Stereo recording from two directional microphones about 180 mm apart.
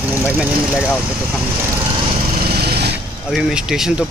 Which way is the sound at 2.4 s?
60° right (ahead or behind).